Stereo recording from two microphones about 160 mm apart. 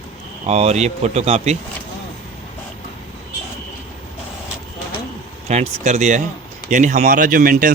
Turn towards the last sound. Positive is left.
turn(degrees=-60)  # may be behind; listen again after turning